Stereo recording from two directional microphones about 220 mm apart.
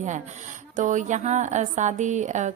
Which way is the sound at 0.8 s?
35° right (ahead or behind).